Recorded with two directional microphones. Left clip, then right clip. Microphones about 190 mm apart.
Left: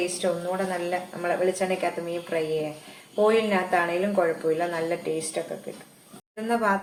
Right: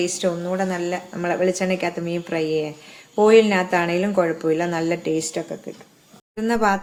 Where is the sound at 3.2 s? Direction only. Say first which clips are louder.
Right 8 dB; 60° right (ahead or behind).